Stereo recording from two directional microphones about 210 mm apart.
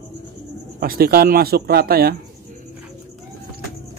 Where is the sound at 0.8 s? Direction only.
45° right (ahead or behind).